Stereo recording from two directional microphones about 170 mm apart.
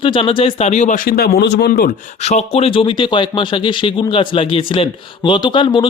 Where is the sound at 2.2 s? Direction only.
40° left (ahead or behind).